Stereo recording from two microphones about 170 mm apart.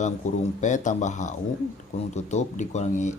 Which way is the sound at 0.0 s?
45° left (ahead or behind).